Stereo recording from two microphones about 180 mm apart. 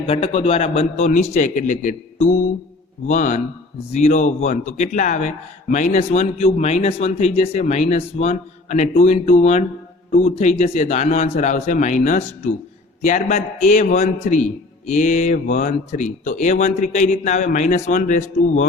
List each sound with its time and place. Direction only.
0.1 s a man's voice: 35° left (ahead or behind)